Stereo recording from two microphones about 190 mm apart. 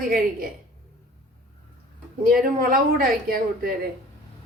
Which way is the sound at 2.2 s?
50° right (ahead or behind).